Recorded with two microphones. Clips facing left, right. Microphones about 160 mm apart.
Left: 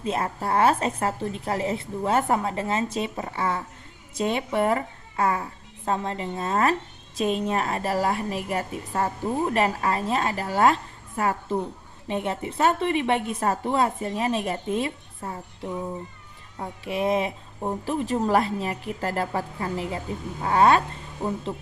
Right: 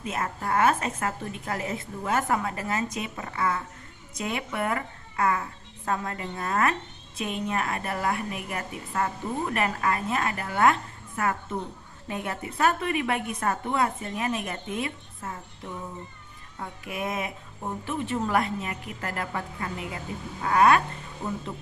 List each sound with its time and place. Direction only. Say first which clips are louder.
0.0 s a woman's voice: left 4 dB; 30° left (ahead or behind)
16.6 s a woman's voice: left 6 dB; 30° left (ahead or behind)